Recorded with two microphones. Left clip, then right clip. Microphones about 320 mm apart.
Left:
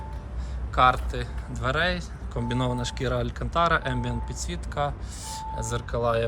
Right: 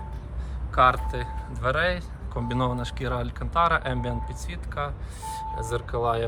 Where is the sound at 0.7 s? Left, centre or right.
Centre.